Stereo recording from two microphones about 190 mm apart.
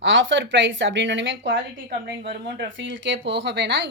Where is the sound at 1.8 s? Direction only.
55° right (ahead or behind).